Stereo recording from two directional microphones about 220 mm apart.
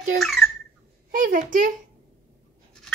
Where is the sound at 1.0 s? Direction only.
40° right (ahead or behind).